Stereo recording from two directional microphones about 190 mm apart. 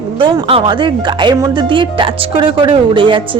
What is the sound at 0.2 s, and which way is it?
Speech, 25° right (ahead or behind).